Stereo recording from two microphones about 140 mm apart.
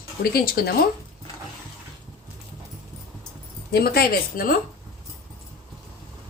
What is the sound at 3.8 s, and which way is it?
Speech, 90° left.